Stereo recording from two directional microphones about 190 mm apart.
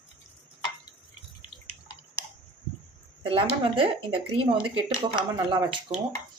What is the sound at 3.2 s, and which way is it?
Speech, 30° right (ahead or behind).